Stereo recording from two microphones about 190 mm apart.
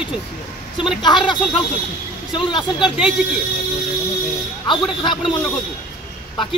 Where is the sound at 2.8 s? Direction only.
5° right (ahead or behind).